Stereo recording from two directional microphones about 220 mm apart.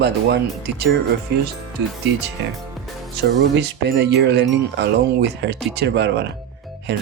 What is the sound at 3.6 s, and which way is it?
Wind chime, 50° right (ahead or behind).